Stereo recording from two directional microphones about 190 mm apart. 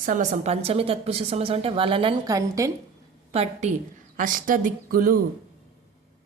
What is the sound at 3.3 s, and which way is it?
Speech, 35° right (ahead or behind).